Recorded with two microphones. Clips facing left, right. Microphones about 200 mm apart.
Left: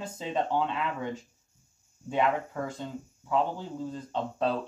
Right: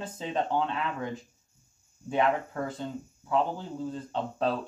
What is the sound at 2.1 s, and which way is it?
Speech, 5° left (ahead or behind).